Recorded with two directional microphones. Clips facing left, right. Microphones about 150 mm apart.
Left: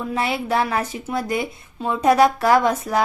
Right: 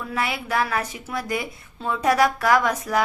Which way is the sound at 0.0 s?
25° left (ahead or behind).